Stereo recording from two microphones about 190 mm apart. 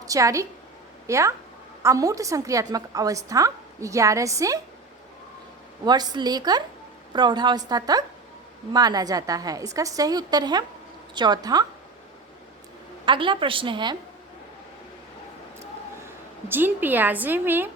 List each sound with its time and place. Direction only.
0.0 s a woman's voice: 15° right (ahead or behind)
5.8 s a woman's voice: 20° right (ahead or behind)
13.1 s a woman's voice: 25° right (ahead or behind)
16.5 s a woman's voice: 10° right (ahead or behind)